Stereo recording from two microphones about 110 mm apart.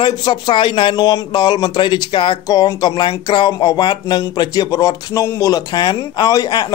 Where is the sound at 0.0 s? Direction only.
45° left (ahead or behind).